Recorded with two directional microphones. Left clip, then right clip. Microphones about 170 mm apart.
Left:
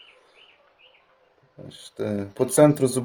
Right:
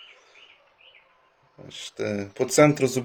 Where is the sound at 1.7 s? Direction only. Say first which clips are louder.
Even; 20° left (ahead or behind).